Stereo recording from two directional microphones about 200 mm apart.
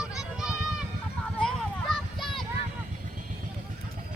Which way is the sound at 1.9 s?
Centre (ahead or behind).